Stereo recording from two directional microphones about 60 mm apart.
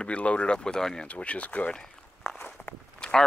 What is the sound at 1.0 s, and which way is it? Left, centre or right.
Speech, left.